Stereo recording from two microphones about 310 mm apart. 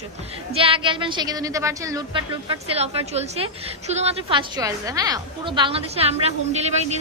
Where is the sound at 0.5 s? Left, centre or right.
Centre.